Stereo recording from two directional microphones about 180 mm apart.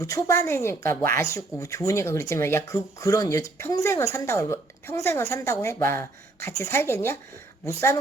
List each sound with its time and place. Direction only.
0.0 s speech: 15° left (ahead or behind)